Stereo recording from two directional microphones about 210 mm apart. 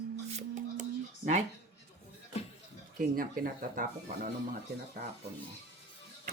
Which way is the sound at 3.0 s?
40° right (ahead or behind).